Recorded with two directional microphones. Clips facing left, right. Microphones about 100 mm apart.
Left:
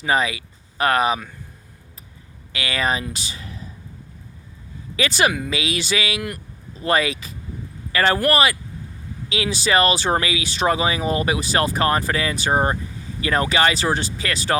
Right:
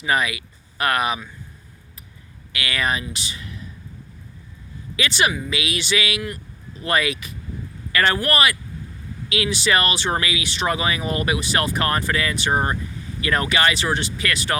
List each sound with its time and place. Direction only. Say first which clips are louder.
0.0 s speech: left 1 dB; 30° left (ahead or behind)
2.5 s speech: left 1 dB; 30° left (ahead or behind)
4.9 s speech: left 2 dB; 40° left (ahead or behind)